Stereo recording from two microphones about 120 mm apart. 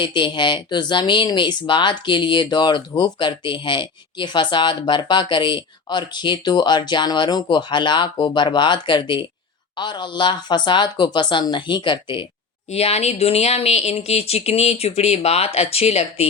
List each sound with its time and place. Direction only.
0.0 s speech: 40° left (ahead or behind)
12.7 s speech: 60° left (ahead or behind)